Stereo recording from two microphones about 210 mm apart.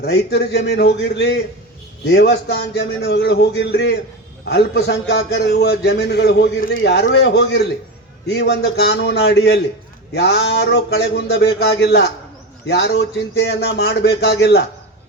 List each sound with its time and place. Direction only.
0.0 s a man's voice: 50° left (ahead or behind)